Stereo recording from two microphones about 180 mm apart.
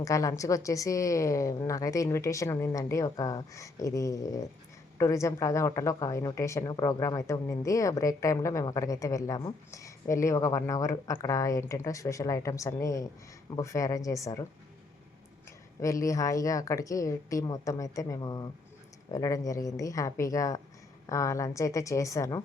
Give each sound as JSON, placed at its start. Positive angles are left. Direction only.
{"t": 0.0, "sound": "speech", "side_deg": 20}
{"t": 15.8, "sound": "a woman's voice", "side_deg": 15}